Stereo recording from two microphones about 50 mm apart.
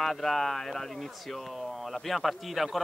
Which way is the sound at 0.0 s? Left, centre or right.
Centre.